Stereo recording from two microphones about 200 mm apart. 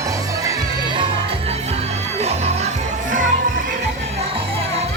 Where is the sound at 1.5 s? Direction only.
35° right (ahead or behind).